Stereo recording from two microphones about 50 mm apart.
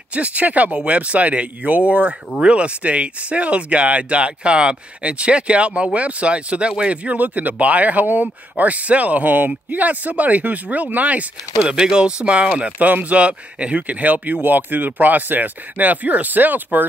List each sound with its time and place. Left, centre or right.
0.1 s speech: right
11.8 s speech: centre
12.7 s speech: right